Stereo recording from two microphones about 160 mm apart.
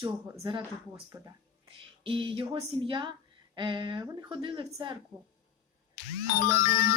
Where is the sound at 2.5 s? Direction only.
30° right (ahead or behind).